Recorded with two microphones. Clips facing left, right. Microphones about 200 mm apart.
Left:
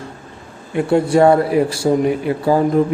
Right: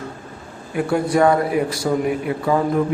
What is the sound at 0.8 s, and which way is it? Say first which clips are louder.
A man's voice: left 4 dB; 25° left (ahead or behind).